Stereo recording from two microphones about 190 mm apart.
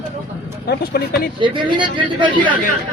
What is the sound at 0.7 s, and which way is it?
Speech, 55° left (ahead or behind).